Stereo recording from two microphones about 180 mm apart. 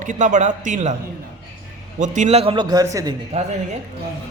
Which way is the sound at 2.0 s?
40° right (ahead or behind).